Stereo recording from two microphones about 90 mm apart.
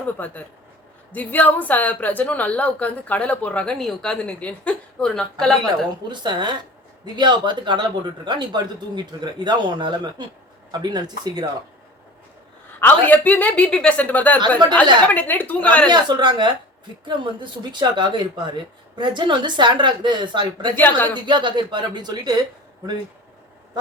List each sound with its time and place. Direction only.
0.2 s a woman's voice: 20° left (ahead or behind)
6.1 s speech: 60° right (ahead or behind)
12.8 s a woman's voice: 20° left (ahead or behind)
15.9 s speech: 55° right (ahead or behind)
20.7 s speech: 20° left (ahead or behind)
21.2 s speech: 60° right (ahead or behind)